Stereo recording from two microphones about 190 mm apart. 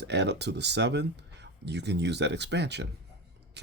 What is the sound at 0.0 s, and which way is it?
Speech, 65° right (ahead or behind).